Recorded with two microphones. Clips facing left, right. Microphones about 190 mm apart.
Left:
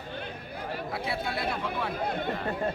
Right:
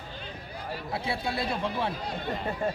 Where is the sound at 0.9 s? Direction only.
25° right (ahead or behind).